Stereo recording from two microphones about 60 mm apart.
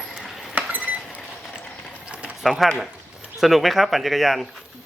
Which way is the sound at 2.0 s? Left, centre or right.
Centre.